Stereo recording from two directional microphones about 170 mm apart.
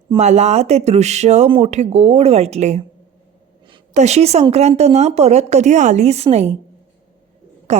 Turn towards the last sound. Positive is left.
turn(degrees=-40)  # may be behind; listen again after turning